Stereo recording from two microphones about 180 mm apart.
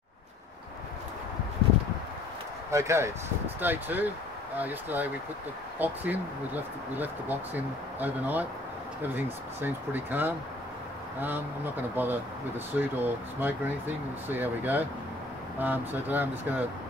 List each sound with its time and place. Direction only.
2.7 s speech: 15° right (ahead or behind)